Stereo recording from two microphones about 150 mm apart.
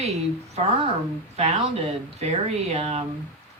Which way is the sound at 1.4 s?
45° right (ahead or behind).